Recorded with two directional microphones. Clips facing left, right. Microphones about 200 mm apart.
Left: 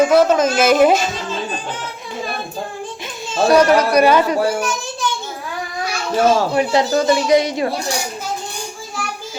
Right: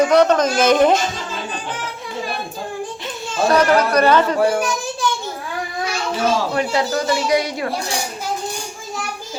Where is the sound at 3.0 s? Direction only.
10° left (ahead or behind).